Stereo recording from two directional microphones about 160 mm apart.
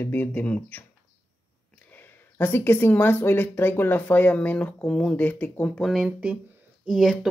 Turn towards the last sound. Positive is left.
turn(degrees=0)  # may be behind; listen again after turning